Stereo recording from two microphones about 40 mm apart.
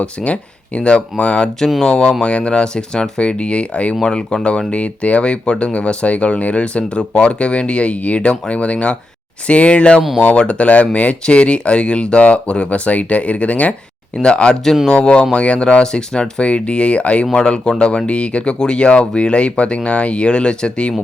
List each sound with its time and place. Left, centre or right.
0.0 s speech: left
17.3 s speech: left